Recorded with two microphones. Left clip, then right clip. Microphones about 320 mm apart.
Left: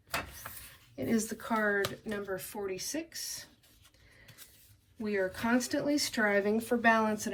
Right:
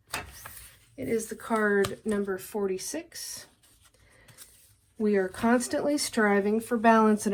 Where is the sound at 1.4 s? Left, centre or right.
Centre.